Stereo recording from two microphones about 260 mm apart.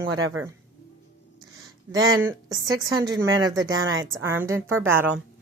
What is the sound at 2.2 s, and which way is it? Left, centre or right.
Speech, centre.